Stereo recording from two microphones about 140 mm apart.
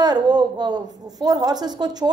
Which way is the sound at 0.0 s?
30° right (ahead or behind).